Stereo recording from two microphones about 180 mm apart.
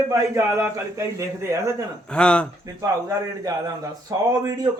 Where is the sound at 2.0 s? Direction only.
5° left (ahead or behind).